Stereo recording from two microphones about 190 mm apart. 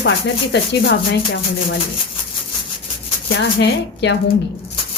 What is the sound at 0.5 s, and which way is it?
Speech, 65° left (ahead or behind).